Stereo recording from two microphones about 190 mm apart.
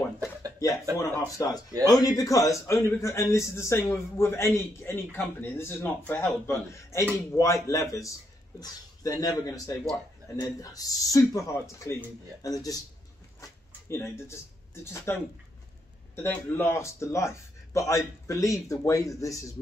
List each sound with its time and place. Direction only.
0.9 s a man's voice: 15° left (ahead or behind)
16.2 s a man's voice: 10° left (ahead or behind)